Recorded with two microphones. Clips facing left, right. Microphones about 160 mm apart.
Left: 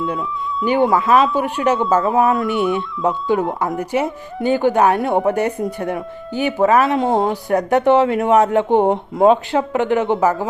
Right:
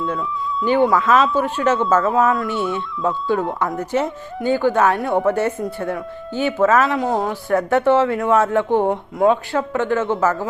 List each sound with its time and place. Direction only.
0.6 s speech: 15° left (ahead or behind)